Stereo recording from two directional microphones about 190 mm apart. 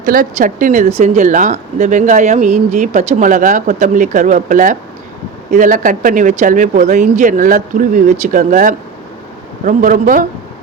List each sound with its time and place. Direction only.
0.0 s speech: 45° right (ahead or behind)